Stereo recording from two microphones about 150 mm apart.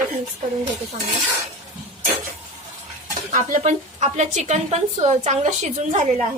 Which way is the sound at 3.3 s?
55° right (ahead or behind).